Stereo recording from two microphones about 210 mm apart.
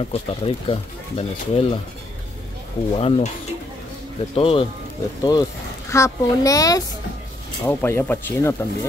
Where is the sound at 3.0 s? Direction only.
30° left (ahead or behind).